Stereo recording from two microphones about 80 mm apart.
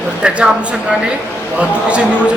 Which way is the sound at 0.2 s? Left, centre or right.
Centre.